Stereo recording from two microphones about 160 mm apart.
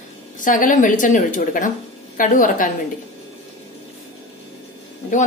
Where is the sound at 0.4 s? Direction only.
55° left (ahead or behind).